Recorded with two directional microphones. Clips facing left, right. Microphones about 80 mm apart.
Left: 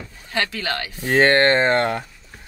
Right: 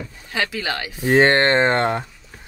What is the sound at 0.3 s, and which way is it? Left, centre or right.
Speech, centre.